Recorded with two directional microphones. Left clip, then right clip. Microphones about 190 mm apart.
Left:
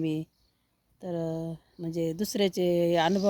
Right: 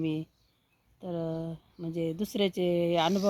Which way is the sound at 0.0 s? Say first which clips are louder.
Left 2 dB; 10° left (ahead or behind).